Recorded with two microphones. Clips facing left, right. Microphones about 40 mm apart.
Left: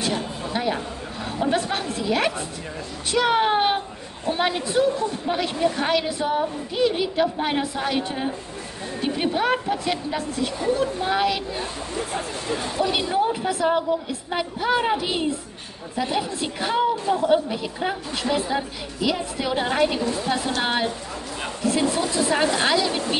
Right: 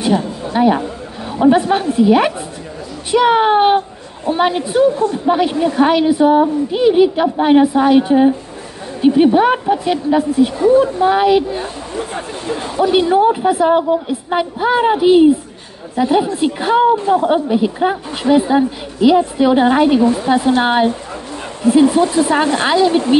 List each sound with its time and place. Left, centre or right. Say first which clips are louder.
0.0 s a sound: right 9 dB; centre
1.5 s a woman's voice: right 12 dB; centre
12.1 s speech: right 5 dB; right
12.9 s a woman's voice: right 14 dB; right